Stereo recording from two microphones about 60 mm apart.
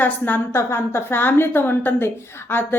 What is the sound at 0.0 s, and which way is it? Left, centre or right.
Speech, left.